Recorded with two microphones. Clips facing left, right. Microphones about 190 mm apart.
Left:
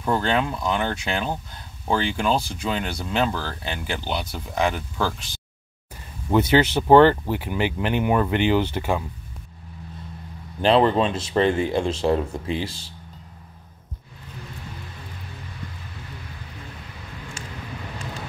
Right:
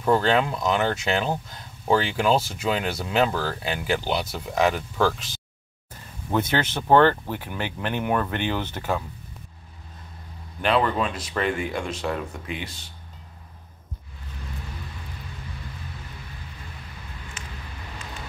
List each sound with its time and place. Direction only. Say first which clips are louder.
0.0 s speech: right 2 dB; 5° right (ahead or behind)
6.5 s speech: left 5 dB; 10° left (ahead or behind)
10.6 s speech: left 5 dB; 30° left (ahead or behind)